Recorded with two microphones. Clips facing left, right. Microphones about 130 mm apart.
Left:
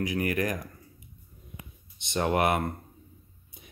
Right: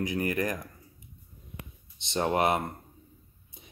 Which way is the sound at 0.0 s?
30° right (ahead or behind).